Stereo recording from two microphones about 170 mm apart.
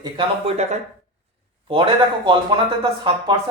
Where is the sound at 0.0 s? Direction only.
30° right (ahead or behind).